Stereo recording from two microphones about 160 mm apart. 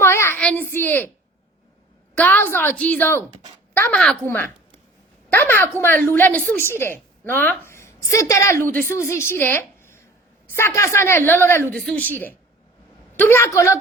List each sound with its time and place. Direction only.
0.0 s a child's voice: 15° left (ahead or behind)
2.1 s a woman's voice: 10° left (ahead or behind)
5.3 s a woman's voice: 15° left (ahead or behind)